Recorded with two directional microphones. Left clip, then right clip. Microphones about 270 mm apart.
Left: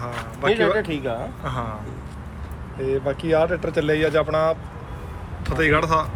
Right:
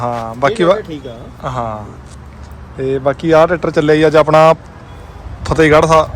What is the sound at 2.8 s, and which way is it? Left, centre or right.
Speech, right.